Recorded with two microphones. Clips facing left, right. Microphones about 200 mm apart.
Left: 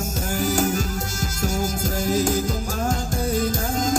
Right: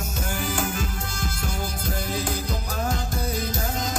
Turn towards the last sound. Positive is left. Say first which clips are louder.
# left 5 dB
turn(degrees=45)  # may be behind; listen again after turning